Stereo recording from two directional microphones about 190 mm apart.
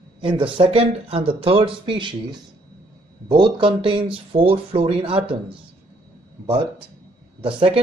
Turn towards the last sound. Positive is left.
turn(degrees=-25)  # may be behind; listen again after turning